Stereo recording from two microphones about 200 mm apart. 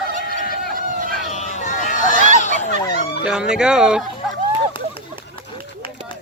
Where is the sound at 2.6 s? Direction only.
45° left (ahead or behind).